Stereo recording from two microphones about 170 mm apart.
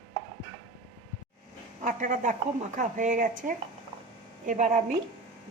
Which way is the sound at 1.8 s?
50° right (ahead or behind).